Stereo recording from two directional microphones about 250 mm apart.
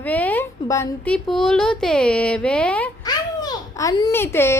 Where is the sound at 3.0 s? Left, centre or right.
Centre.